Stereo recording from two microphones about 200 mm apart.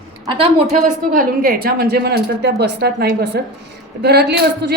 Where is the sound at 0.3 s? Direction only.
25° right (ahead or behind).